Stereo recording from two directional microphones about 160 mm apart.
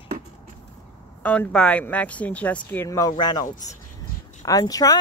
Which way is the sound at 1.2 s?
5° left (ahead or behind).